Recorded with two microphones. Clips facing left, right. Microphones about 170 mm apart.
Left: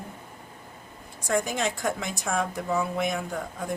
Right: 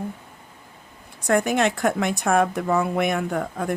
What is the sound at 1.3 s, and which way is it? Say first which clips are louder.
Speech: right 6 dB; 65° right (ahead or behind).